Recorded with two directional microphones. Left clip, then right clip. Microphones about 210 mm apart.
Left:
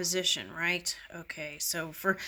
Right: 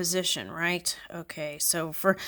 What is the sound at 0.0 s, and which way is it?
Speech, 50° right (ahead or behind).